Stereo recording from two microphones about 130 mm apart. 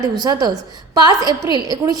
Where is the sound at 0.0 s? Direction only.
30° right (ahead or behind).